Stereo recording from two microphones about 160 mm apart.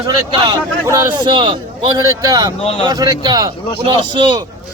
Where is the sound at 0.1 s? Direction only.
25° right (ahead or behind).